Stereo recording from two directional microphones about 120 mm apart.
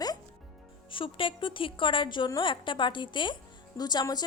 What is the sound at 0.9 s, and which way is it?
A woman's voice, 45° left (ahead or behind).